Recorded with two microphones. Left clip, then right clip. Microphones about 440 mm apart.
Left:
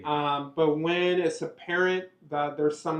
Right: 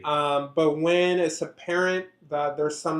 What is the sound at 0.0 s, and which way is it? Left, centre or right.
Speech, right.